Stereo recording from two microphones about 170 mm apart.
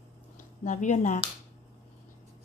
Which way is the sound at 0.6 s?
45° left (ahead or behind).